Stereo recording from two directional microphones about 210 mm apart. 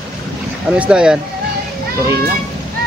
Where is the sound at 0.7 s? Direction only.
5° right (ahead or behind).